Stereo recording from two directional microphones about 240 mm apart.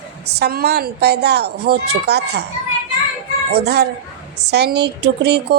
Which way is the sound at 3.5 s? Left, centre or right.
Right.